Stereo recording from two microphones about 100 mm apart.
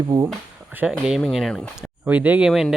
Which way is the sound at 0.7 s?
10° right (ahead or behind).